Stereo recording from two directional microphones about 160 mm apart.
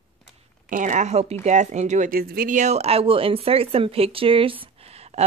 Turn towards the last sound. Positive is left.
turn(degrees=-40)  # may be behind; listen again after turning